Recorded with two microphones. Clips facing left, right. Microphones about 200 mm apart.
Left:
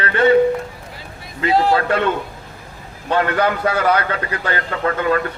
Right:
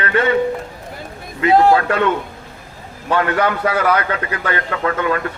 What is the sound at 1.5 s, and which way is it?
Speech, 50° right (ahead or behind).